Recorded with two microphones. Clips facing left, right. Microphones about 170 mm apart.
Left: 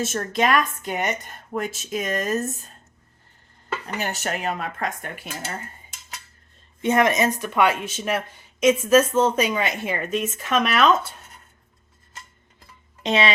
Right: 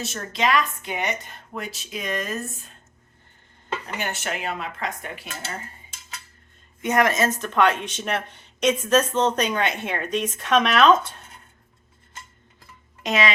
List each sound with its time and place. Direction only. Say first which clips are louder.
0.0 s a woman's voice: left 3 dB; 50° left (ahead or behind)
3.9 s speech: left 3 dB; 40° left (ahead or behind)
6.8 s speech: left 2 dB; 25° left (ahead or behind); by 11.1 s 5° left (ahead or behind)
13.0 s speech: left 2 dB; 30° left (ahead or behind)